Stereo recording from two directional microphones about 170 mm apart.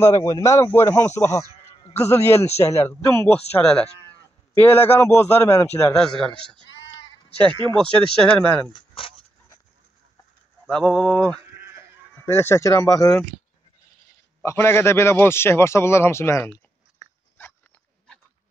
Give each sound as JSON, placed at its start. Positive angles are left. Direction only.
{"t": 0.0, "sound": "a man's voice", "side_deg": 20}
{"t": 6.7, "sound": "sheep", "side_deg": 90}
{"t": 7.4, "sound": "speech", "side_deg": -30}
{"t": 7.8, "sound": "a man's voice", "side_deg": 5}
{"t": 9.0, "sound": "speech", "side_deg": 30}
{"t": 10.7, "sound": "speech", "side_deg": 5}
{"t": 11.5, "sound": "sheep", "side_deg": -15}
{"t": 12.2, "sound": "a man's voice", "side_deg": 15}
{"t": 14.4, "sound": "a man's voice", "side_deg": 15}